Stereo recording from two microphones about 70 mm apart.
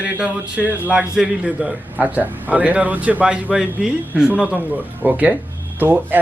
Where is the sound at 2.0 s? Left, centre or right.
Right.